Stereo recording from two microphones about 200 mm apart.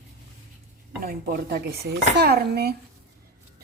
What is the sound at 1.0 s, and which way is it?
A woman's voice, 50° right (ahead or behind).